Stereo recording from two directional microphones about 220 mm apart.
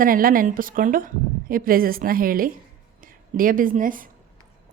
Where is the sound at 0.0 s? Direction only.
40° right (ahead or behind).